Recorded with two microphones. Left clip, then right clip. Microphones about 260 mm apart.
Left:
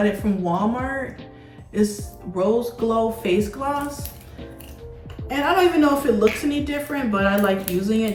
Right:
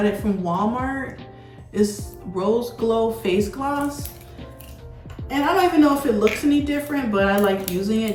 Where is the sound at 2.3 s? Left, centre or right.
Centre.